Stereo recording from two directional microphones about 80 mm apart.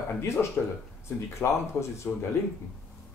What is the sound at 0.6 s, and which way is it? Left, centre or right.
Speech, left.